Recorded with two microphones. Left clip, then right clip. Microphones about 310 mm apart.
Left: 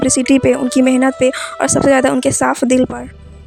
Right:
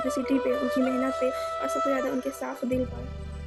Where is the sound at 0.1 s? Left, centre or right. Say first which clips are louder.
Left 12 dB; left.